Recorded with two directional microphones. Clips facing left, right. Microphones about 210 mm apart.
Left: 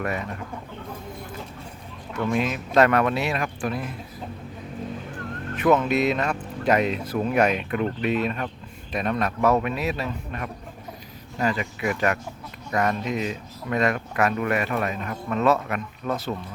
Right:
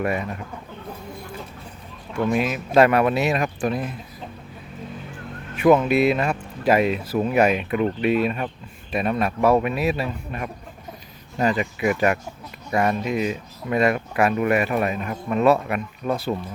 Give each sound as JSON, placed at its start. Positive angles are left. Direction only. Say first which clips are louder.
{"t": 2.1, "sound": "speech", "louder": "right 3 dB", "side_deg": -10}
{"t": 5.5, "sound": "speech", "louder": "right 4 dB", "side_deg": -10}